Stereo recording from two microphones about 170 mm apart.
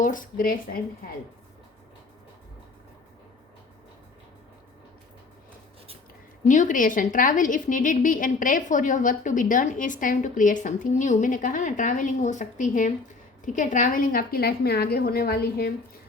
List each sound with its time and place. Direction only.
0.0 s a woman's voice: 50° left (ahead or behind)
6.4 s a woman's voice: 45° left (ahead or behind); by 15.7 s 65° left (ahead or behind)